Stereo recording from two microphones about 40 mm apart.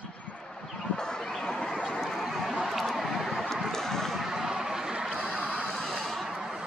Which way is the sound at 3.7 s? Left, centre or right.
Centre.